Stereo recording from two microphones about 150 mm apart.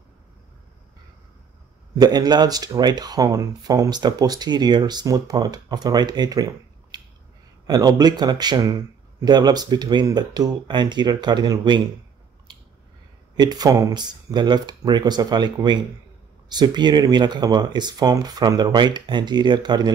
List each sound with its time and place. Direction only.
2.0 s speech: 25° right (ahead or behind)
13.4 s speech: 25° right (ahead or behind)